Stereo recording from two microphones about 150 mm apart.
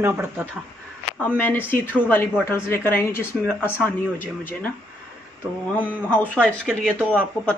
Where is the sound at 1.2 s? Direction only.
10° left (ahead or behind).